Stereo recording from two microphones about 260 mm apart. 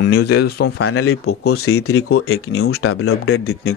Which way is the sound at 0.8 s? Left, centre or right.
Left.